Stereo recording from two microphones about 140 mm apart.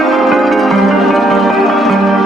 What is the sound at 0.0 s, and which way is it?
Music, centre (ahead or behind).